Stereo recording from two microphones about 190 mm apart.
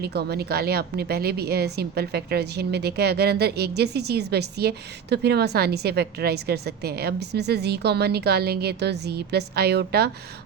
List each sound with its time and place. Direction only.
0.0 s a woman's voice: 55° right (ahead or behind)